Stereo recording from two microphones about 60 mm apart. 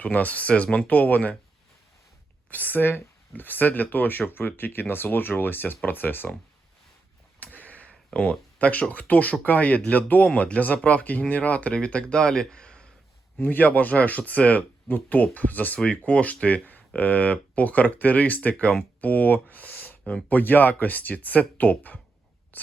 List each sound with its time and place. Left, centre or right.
0.0 s speech: left
2.5 s speech: left
7.3 s speech: left
13.4 s speech: left
22.5 s a sound: left